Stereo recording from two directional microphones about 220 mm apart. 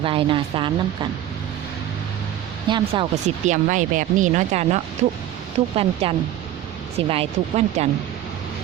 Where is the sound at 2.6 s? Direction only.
20° right (ahead or behind).